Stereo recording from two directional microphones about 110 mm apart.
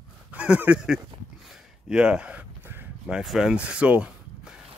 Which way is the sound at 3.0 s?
5° right (ahead or behind).